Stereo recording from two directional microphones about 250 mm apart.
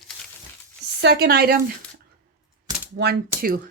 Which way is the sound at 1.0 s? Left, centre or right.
Right.